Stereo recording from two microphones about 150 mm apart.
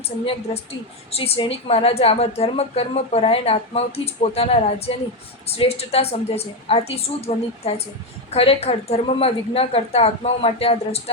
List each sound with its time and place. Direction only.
1.1 s a woman's voice: 40° left (ahead or behind)